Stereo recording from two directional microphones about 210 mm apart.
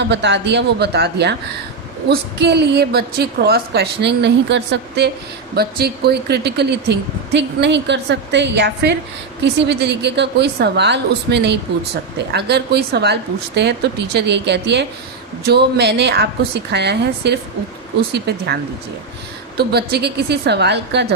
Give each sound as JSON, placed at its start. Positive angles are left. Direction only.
{"t": 0.1, "sound": "speech", "side_deg": -55}